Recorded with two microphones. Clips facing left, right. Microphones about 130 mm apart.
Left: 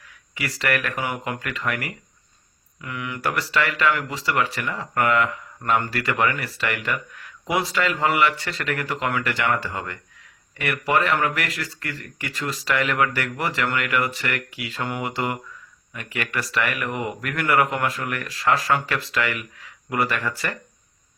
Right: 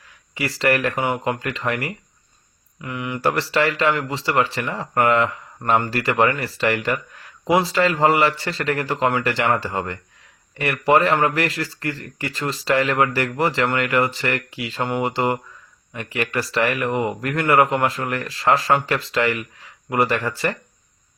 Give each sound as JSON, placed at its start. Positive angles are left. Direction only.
{"t": 0.3, "sound": "speech", "side_deg": -30}